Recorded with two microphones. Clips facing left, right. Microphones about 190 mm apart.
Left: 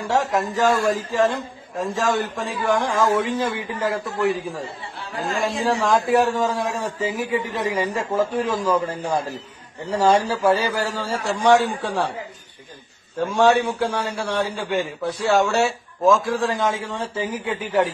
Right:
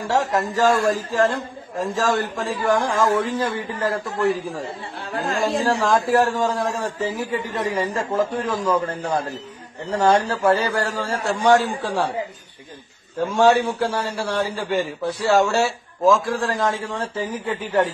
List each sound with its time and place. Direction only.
0.1 s a man's voice: centre (ahead or behind)
13.2 s a man's voice: centre (ahead or behind)